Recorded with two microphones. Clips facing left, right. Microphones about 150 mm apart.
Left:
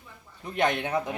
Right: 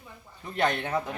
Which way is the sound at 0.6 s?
Centre (ahead or behind).